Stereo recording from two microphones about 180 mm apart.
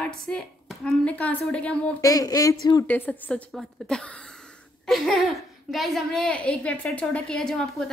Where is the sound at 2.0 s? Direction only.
20° left (ahead or behind).